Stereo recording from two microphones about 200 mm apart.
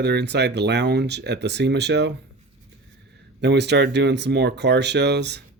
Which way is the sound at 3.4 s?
60° right (ahead or behind).